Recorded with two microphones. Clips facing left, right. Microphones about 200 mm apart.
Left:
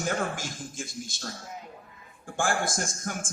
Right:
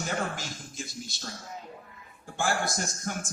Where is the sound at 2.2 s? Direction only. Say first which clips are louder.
Left 1 dB; 50° left (ahead or behind).